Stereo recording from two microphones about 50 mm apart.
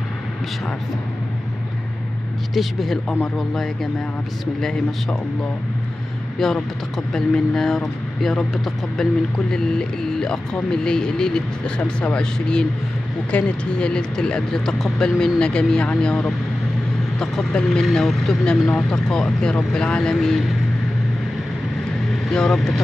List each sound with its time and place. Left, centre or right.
2.5 s speech: centre
6.4 s speech: centre
9.5 s speech: centre
11.8 s speech: left
12.2 s speech: centre
22.3 s speech: centre